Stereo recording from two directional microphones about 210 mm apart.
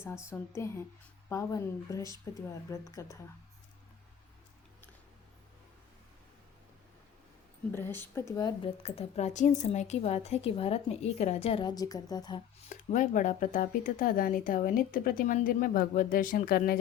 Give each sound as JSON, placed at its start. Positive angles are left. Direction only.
{"t": 0.3, "sound": "speech", "side_deg": 15}
{"t": 7.7, "sound": "a woman's voice", "side_deg": 10}
{"t": 12.6, "sound": "speech", "side_deg": 35}